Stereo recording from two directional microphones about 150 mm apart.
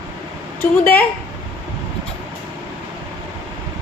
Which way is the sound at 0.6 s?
15° left (ahead or behind).